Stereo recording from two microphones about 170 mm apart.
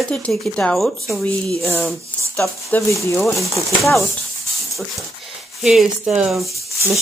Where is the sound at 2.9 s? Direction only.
15° left (ahead or behind).